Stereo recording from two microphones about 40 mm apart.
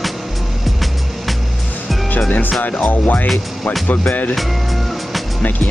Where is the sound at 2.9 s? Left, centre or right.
Left.